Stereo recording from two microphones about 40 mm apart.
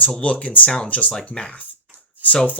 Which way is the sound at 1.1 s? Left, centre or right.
Centre.